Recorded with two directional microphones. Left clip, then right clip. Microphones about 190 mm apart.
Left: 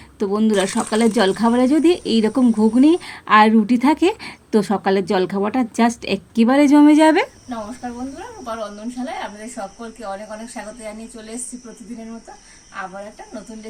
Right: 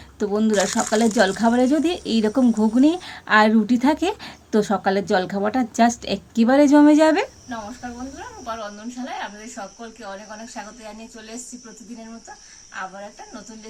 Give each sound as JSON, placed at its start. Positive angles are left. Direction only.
{"t": 0.2, "sound": "speech", "side_deg": 10}
{"t": 8.4, "sound": "speech", "side_deg": 0}
{"t": 9.6, "sound": "speech", "side_deg": -15}